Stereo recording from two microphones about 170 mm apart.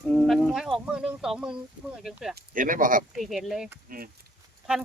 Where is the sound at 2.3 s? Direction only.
55° right (ahead or behind).